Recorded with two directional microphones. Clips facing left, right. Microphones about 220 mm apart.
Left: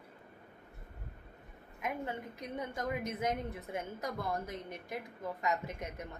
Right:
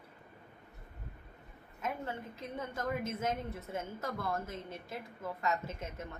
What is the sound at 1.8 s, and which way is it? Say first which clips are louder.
A woman's voice: left 1 dB; 15° left (ahead or behind).